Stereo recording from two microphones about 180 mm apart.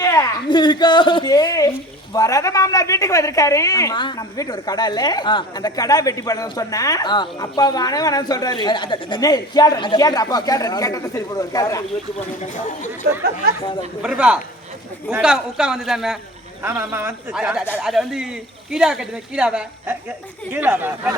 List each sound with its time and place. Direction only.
0.0 s a woman's voice: 15° left (ahead or behind)
14.0 s speech: 5° right (ahead or behind)
16.9 s speech: 15° right (ahead or behind)